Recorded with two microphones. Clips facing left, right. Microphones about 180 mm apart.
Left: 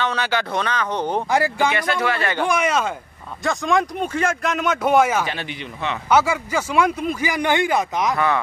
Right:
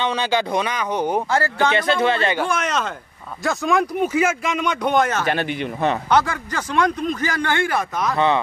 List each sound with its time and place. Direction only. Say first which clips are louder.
0.0 s speech: right 2 dB; 15° right (ahead or behind)
1.3 s speech: left 3 dB; 15° left (ahead or behind)
1.8 s speech: right 3 dB; 25° right (ahead or behind)
2.4 s speech: left 3 dB; 10° left (ahead or behind)
3.4 s speech: even; centre (ahead or behind)
5.2 s speech: right 6 dB; 50° right (ahead or behind)
6.0 s speech: left 1 dB; 10° left (ahead or behind)